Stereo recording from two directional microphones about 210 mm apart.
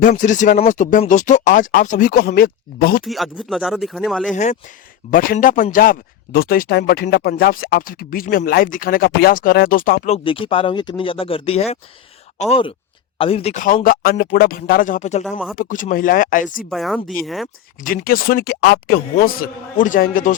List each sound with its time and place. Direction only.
0.0 s speech: 40° left (ahead or behind)
3.0 s speech: centre (ahead or behind)
5.1 s speech: 40° left (ahead or behind)
10.2 s speech: 25° left (ahead or behind)
15.2 s speech: centre (ahead or behind)
15.5 s speech: 40° left (ahead or behind)
16.6 s speech: centre (ahead or behind)
17.8 s speech: 45° left (ahead or behind)